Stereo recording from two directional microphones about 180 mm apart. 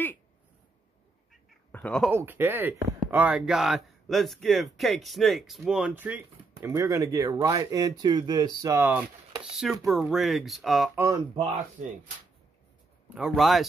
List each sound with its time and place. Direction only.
1.7 s speech: 5° left (ahead or behind)
2.1 s speech: 10° right (ahead or behind)
9.4 s speech: centre (ahead or behind)
11.0 s speech: 20° right (ahead or behind)
11.8 s speech: 40° right (ahead or behind)
13.1 s speech: 5° right (ahead or behind)